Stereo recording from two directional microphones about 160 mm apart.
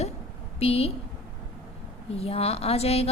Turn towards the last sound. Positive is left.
turn(degrees=40)  # may be behind; listen again after turning